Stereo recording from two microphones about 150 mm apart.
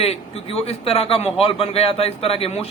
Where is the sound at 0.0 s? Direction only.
40° left (ahead or behind).